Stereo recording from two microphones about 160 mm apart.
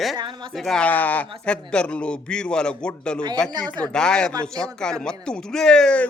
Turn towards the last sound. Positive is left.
turn(degrees=5)  # may be behind; listen again after turning